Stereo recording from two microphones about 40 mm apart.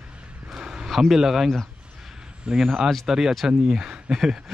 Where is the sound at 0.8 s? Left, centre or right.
Centre.